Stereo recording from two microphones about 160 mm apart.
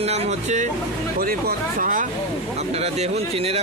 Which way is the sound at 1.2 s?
65° right (ahead or behind).